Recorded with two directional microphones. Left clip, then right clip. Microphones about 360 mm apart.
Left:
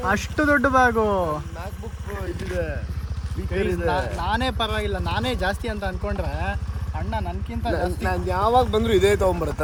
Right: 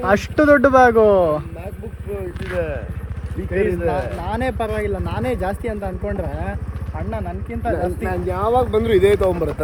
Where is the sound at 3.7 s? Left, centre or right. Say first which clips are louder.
Right 3 dB; left.